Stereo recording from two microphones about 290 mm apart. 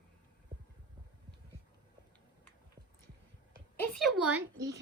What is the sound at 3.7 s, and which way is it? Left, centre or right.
Speech, centre.